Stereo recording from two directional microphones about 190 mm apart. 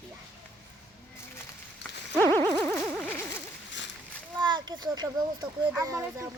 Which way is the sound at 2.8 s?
5° left (ahead or behind).